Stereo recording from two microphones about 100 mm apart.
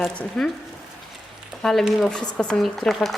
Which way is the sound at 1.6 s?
5° left (ahead or behind).